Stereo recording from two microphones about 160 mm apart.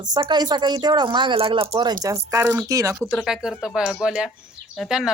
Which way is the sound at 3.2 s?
5° right (ahead or behind).